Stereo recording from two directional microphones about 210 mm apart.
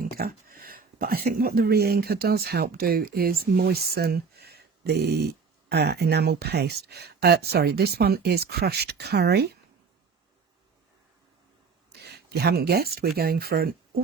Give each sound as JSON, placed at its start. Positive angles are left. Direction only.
{"t": 0.0, "sound": "speech", "side_deg": -45}
{"t": 11.9, "sound": "speech", "side_deg": -50}